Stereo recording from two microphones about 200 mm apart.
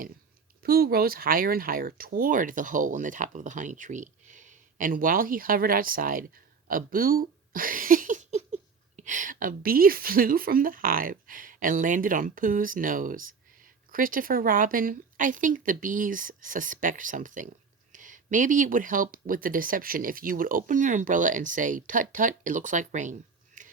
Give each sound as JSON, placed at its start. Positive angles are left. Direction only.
{"t": 0.6, "sound": "a woman's voice", "side_deg": -50}